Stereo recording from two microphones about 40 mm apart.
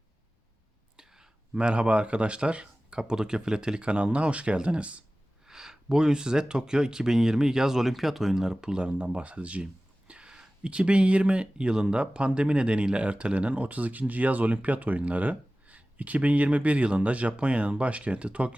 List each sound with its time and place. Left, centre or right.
0.9 s whispering: centre
1.5 s speech: right
5.5 s speech: centre
8.8 s speech: right
10.1 s speech: right